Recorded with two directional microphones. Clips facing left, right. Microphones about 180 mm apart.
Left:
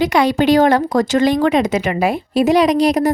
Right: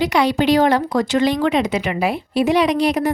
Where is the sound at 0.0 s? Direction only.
45° left (ahead or behind).